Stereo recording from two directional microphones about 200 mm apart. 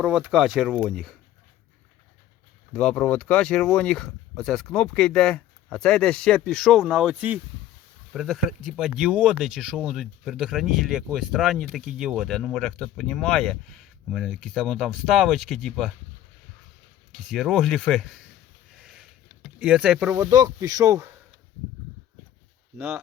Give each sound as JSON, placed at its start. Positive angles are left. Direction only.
{"t": 0.0, "sound": "speech", "side_deg": -5}
{"t": 2.7, "sound": "speech", "side_deg": 5}
{"t": 17.1, "sound": "speech", "side_deg": 0}
{"t": 18.8, "sound": "a sound", "side_deg": 0}
{"t": 19.5, "sound": "speech", "side_deg": -5}
{"t": 20.3, "sound": "speech", "side_deg": -20}